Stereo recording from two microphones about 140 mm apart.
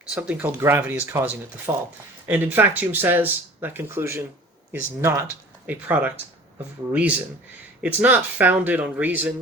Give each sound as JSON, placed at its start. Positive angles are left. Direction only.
{"t": 0.1, "sound": "speech", "side_deg": -10}
{"t": 7.8, "sound": "speech", "side_deg": -10}